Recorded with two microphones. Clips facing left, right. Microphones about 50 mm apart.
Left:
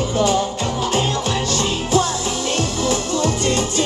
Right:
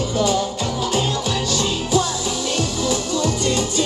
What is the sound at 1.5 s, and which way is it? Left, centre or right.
Music, left.